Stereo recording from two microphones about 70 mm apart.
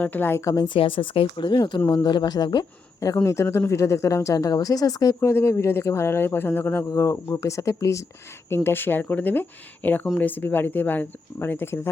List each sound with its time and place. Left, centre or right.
0.0 s speech: left
0.4 s a woman's voice: left
1.5 s speech: left
3.2 s speech: left
5.2 s speech: left
6.8 s speech: left